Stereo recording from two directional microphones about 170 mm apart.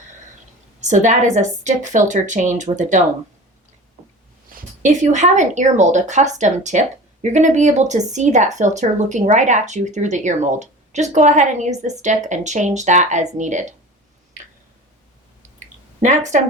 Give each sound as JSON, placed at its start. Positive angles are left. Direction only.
{"t": 0.8, "sound": "a woman's voice", "side_deg": -45}
{"t": 4.8, "sound": "a woman's voice", "side_deg": -45}
{"t": 15.5, "sound": "a sound", "side_deg": -45}